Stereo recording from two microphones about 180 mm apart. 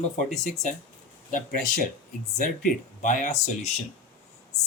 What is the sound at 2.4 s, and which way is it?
Speech, 45° left (ahead or behind).